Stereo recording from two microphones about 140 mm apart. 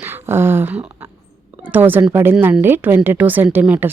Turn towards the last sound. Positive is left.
turn(degrees=-15)  # may be behind; listen again after turning